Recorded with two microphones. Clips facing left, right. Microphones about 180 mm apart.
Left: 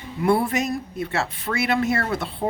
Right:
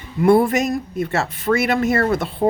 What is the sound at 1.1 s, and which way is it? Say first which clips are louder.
Speech: right 7 dB; 45° right (ahead or behind).